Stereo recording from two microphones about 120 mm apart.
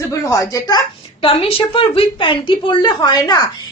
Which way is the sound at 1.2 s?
50° left (ahead or behind).